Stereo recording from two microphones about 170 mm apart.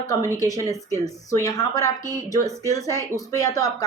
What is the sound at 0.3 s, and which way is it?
A woman's voice, 20° left (ahead or behind).